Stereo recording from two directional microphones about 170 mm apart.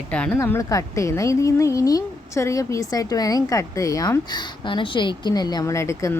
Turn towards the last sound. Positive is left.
turn(degrees=15)  # may be behind; listen again after turning